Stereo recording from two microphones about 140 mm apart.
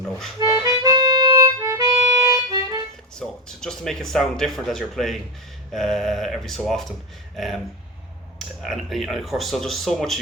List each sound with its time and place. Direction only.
0.3 s music: 25° right (ahead or behind)
3.2 s speech: 5° left (ahead or behind)